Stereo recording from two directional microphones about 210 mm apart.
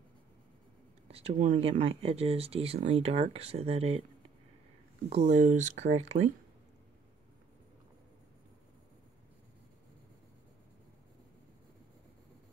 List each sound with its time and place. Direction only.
1.0 s speech: 30° right (ahead or behind)
5.1 s speech: 35° right (ahead or behind)